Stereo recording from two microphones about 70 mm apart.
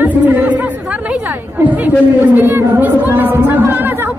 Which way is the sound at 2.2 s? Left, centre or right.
Right.